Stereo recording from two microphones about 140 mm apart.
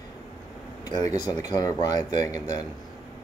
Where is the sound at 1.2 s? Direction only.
30° left (ahead or behind).